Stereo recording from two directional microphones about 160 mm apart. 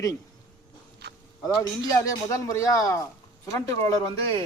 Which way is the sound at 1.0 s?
90° right.